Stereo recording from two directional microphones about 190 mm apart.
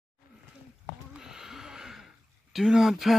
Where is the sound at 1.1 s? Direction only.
5° right (ahead or behind).